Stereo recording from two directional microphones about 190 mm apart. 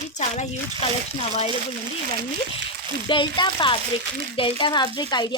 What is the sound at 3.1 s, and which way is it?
Speech, 25° left (ahead or behind).